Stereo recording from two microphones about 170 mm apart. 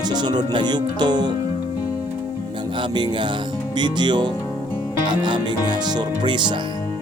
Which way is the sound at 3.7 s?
25° right (ahead or behind).